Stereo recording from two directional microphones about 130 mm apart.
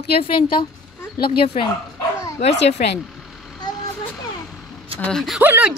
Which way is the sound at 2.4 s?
55° left (ahead or behind).